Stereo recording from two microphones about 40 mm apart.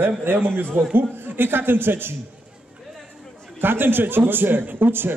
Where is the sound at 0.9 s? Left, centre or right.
Right.